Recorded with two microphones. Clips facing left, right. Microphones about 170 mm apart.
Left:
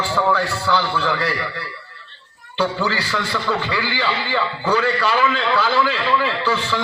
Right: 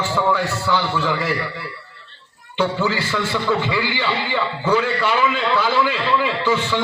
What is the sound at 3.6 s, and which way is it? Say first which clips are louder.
A man's voice: right 1 dB; 15° right (ahead or behind).